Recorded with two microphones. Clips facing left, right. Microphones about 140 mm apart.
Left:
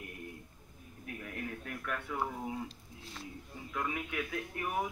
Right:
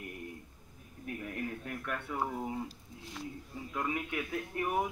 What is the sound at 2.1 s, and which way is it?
A man's voice, 15° right (ahead or behind).